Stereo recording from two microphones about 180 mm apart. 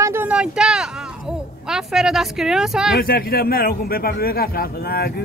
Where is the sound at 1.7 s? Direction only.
Centre (ahead or behind).